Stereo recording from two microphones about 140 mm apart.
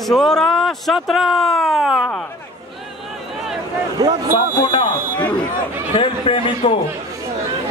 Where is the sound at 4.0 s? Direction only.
25° right (ahead or behind).